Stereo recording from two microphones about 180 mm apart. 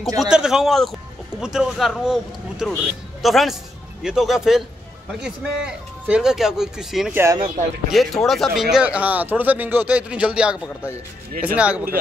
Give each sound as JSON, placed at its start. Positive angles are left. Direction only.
{"t": 0.2, "sound": "speech", "side_deg": -5}
{"t": 7.2, "sound": "speech", "side_deg": -15}
{"t": 7.9, "sound": "speech", "side_deg": 0}